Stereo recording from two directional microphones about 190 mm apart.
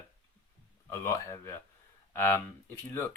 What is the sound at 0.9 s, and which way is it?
Speech, 15° left (ahead or behind).